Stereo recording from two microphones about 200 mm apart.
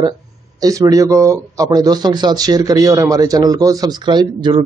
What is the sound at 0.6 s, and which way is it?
Speech, 20° right (ahead or behind).